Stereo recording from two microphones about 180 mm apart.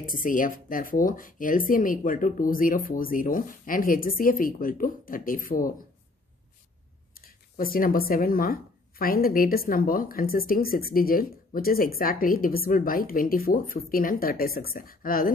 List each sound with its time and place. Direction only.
0.0 s speech: 50° left (ahead or behind)
7.2 s speech: 55° left (ahead or behind)